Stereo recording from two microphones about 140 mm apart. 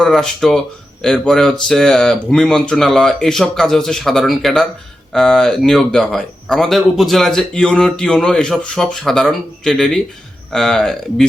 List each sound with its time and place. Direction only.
0.0 s speech: 5° left (ahead or behind)